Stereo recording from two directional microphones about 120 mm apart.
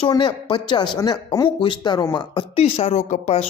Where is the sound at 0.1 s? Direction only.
40° left (ahead or behind).